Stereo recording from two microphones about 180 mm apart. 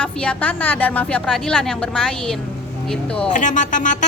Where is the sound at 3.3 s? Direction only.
45° left (ahead or behind).